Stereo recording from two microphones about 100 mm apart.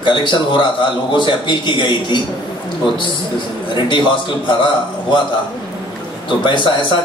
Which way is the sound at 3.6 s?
55° left (ahead or behind).